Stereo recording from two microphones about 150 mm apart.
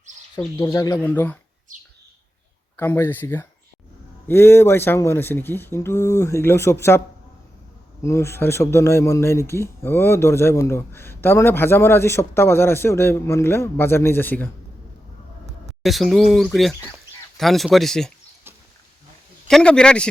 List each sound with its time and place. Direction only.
0.6 s speech: 25° left (ahead or behind)
1.0 s speech: 15° left (ahead or behind)
2.7 s speech: 15° left (ahead or behind)
8.0 s speech: 20° left (ahead or behind)
15.8 s speech: centre (ahead or behind)
19.5 s speech: 5° left (ahead or behind)